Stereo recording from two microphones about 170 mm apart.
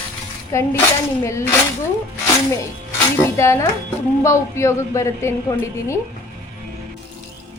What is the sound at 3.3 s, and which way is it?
Speech, 15° left (ahead or behind).